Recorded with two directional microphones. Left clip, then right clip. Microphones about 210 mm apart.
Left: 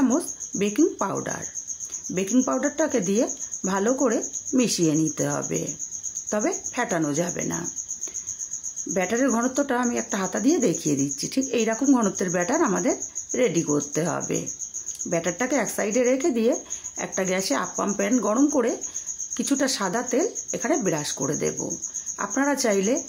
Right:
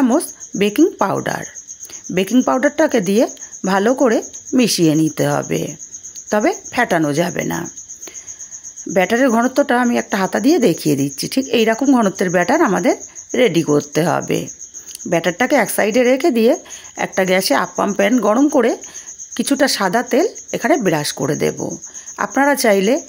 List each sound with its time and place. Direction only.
0.0 s speech: 35° right (ahead or behind)
8.9 s speech: 35° right (ahead or behind)